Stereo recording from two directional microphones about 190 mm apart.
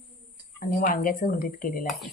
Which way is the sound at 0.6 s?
50° left (ahead or behind).